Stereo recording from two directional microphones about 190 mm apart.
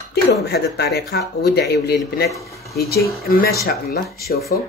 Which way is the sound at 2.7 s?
55° left (ahead or behind).